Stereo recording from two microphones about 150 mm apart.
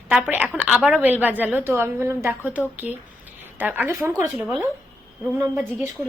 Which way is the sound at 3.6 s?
15° right (ahead or behind).